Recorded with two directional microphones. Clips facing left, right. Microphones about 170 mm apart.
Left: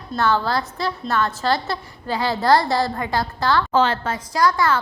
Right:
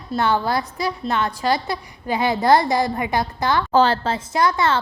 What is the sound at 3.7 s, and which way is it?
A woman's voice, 35° right (ahead or behind).